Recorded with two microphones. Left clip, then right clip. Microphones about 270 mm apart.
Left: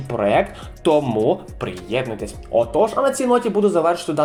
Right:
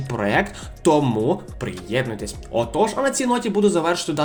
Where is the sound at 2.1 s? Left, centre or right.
Right.